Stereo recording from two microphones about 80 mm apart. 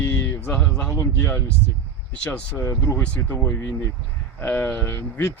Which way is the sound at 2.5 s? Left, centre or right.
Left.